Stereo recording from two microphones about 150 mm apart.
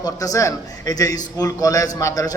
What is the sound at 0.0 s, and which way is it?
A man's voice, 25° left (ahead or behind).